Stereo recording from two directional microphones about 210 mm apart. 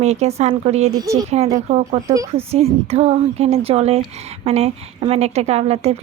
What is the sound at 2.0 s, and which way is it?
Speech, 15° right (ahead or behind).